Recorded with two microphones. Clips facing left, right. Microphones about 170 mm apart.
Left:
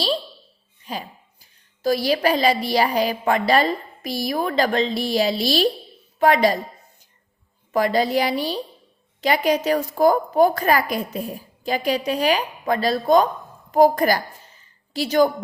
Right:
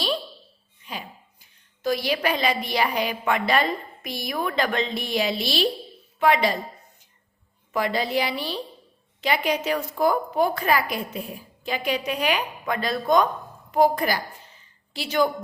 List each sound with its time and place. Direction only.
0.9 s a woman's voice: 40° left (ahead or behind)
7.7 s a woman's voice: 40° left (ahead or behind)